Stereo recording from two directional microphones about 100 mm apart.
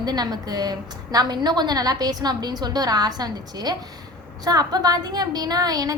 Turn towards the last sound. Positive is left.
turn(degrees=-40)  # may be behind; listen again after turning